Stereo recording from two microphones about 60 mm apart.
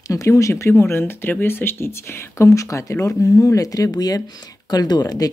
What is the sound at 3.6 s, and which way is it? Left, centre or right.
Speech, left.